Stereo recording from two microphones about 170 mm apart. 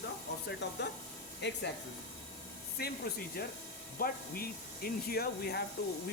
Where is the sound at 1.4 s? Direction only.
90° left.